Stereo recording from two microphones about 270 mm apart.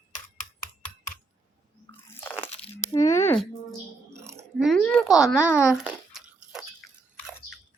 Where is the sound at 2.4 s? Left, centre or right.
Left.